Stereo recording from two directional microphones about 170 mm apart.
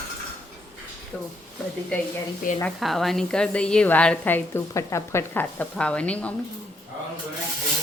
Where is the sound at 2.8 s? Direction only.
Centre (ahead or behind).